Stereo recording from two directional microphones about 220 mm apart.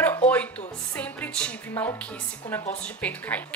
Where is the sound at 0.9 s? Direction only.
5° left (ahead or behind).